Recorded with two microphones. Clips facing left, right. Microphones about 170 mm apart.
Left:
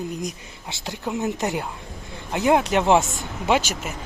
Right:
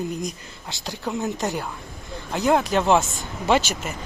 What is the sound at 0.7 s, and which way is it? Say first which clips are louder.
Speech: even; 20° left (ahead or behind).